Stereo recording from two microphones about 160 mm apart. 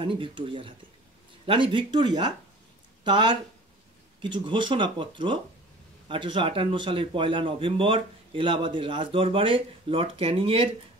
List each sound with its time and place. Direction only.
0.0 s a man's voice: 30° right (ahead or behind)